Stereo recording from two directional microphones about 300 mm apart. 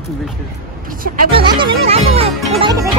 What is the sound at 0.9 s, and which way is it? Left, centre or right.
Speech, right.